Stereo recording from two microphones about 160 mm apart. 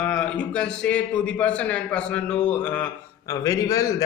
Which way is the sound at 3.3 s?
20° left (ahead or behind).